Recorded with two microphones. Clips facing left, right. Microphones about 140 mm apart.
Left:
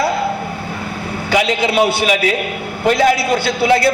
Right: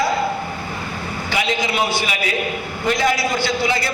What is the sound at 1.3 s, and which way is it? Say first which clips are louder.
A man's voice: left 7 dB; 70° left (ahead or behind).